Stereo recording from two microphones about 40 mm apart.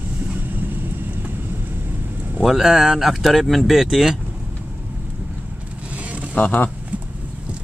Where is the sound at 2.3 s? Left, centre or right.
Centre.